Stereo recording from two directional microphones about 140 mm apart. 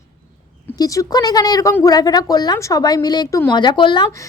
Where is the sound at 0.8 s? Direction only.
25° left (ahead or behind).